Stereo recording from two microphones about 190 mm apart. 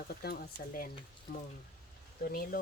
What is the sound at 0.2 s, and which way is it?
Speech, 55° left (ahead or behind).